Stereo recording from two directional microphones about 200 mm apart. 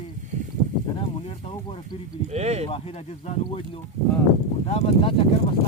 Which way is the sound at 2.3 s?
35° right (ahead or behind).